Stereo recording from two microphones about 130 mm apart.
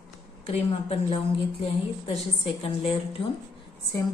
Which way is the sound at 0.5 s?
50° left (ahead or behind).